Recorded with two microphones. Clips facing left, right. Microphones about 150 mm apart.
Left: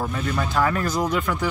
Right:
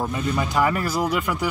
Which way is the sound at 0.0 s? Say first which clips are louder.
Right 1 dB; 10° right (ahead or behind).